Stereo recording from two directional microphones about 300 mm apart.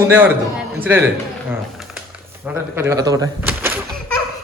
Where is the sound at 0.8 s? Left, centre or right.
Centre.